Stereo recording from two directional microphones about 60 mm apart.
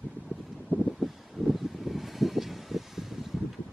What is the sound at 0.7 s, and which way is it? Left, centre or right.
Vehicle, right.